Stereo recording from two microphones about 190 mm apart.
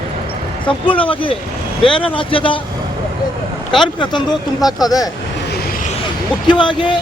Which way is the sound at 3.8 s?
25° left (ahead or behind).